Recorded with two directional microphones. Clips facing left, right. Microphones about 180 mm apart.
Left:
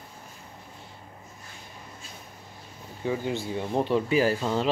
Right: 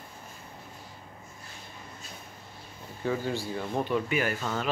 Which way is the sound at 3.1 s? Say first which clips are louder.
Left 1 dB; 20° left (ahead or behind).